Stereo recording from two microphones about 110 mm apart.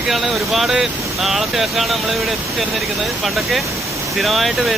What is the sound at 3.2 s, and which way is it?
Speech, centre (ahead or behind).